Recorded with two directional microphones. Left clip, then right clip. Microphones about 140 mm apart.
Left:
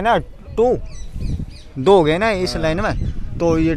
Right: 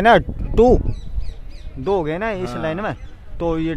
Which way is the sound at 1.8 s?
45° left (ahead or behind).